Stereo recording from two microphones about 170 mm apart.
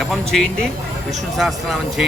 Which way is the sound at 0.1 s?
Centre (ahead or behind).